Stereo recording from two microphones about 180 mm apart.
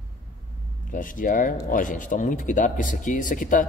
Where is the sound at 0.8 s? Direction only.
50° left (ahead or behind).